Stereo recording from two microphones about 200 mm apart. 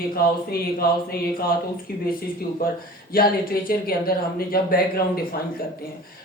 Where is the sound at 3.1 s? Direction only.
45° left (ahead or behind).